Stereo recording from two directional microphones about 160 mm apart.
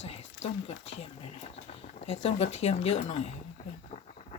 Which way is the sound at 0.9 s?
40° left (ahead or behind).